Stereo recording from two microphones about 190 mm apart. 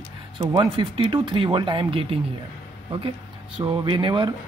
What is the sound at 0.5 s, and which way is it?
Speech, 25° right (ahead or behind).